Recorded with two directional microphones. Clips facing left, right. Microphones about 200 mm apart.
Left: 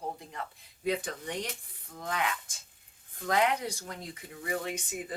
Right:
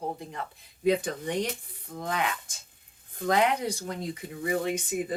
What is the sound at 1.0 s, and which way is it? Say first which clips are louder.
Speech: right 7 dB; 20° right (ahead or behind).